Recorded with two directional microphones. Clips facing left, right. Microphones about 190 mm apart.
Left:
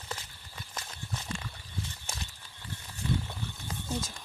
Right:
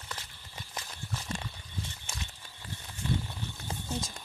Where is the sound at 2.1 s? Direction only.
35° left (ahead or behind).